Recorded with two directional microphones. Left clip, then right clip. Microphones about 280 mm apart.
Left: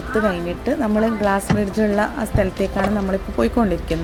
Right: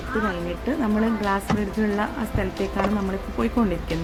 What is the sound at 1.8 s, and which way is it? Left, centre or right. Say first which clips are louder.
Speech: left 6 dB; centre.